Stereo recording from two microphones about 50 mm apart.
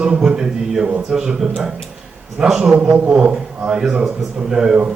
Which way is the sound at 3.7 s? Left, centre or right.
Centre.